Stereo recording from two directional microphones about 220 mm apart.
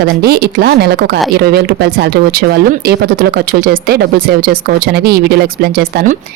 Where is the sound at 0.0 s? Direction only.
45° right (ahead or behind).